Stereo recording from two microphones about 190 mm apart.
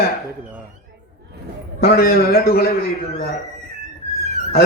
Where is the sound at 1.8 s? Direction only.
55° left (ahead or behind).